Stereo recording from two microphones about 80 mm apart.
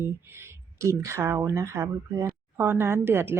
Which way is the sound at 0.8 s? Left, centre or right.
Right.